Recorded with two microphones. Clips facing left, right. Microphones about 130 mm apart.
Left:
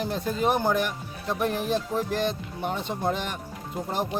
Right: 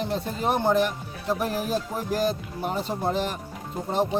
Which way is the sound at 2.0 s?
5° right (ahead or behind).